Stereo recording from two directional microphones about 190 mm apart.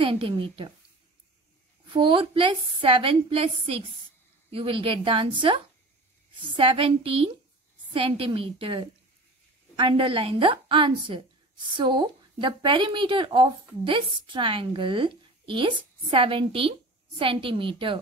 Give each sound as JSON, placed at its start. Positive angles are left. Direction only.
{"t": 0.0, "sound": "a woman's voice", "side_deg": -30}
{"t": 2.0, "sound": "a woman's voice", "side_deg": -25}